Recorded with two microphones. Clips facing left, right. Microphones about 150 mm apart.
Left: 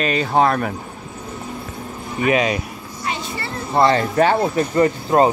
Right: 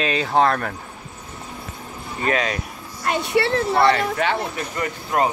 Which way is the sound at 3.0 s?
60° right (ahead or behind).